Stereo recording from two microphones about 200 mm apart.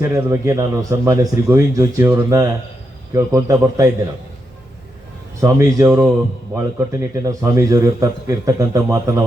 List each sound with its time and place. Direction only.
0.0 s a man's voice: 15° right (ahead or behind)
5.4 s a man's voice: 15° right (ahead or behind)